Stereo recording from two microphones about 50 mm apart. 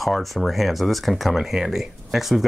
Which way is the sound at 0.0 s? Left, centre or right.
Centre.